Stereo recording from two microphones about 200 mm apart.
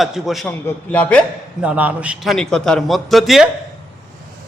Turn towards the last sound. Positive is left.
turn(degrees=0)  # may be behind; listen again after turning